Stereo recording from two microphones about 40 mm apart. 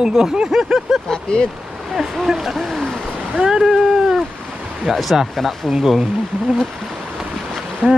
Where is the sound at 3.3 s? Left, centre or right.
Centre.